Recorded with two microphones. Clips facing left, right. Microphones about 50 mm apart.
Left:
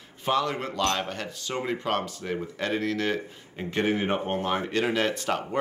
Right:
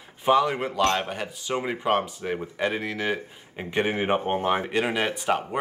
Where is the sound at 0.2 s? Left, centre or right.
Centre.